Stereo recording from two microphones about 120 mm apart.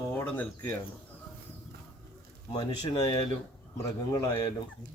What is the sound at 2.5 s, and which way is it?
Speech, 40° left (ahead or behind).